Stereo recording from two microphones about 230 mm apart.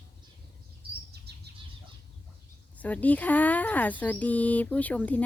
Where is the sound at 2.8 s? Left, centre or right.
Centre.